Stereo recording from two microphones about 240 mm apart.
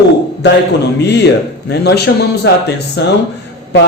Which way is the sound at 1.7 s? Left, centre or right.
Left.